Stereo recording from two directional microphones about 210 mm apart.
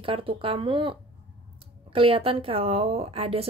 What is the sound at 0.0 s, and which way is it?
Speech, 25° right (ahead or behind).